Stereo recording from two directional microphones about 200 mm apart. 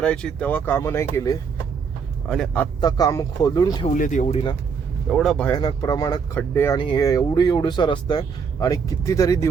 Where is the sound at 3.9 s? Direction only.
40° left (ahead or behind).